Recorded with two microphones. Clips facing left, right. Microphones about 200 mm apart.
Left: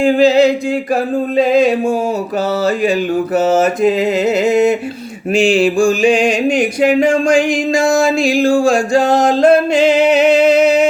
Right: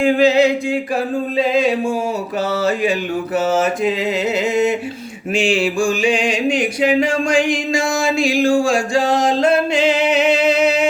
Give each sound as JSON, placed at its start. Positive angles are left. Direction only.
{"t": 0.0, "sound": "music", "side_deg": 35}
{"t": 3.3, "sound": "mantra", "side_deg": 40}
{"t": 5.3, "sound": "music", "side_deg": 35}